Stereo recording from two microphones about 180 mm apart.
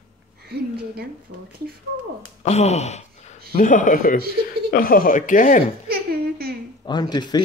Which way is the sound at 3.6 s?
45° left (ahead or behind).